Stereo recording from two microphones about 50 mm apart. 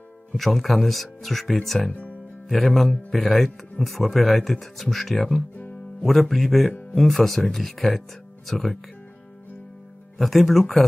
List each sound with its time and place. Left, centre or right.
0.3 s speech: centre
1.9 s speech: left
2.4 s speech: centre
10.1 s speech: centre